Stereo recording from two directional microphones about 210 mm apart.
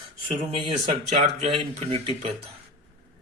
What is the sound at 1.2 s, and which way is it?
Speech, 30° right (ahead or behind).